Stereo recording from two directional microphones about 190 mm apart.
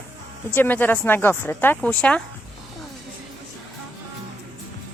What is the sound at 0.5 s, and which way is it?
Speech, 10° left (ahead or behind).